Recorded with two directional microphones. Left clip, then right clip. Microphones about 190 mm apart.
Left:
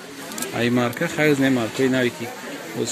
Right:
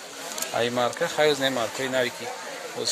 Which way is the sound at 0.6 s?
15° right (ahead or behind).